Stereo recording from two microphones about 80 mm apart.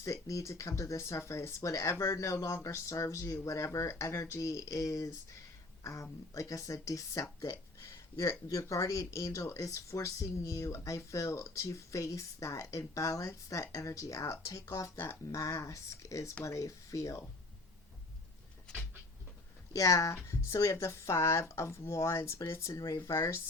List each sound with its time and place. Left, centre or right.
0.0 s speech: left
14.9 s speech: left
19.7 s speech: left